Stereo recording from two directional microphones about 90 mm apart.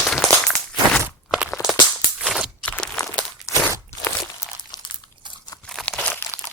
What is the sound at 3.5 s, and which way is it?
Crunch, 35° left (ahead or behind).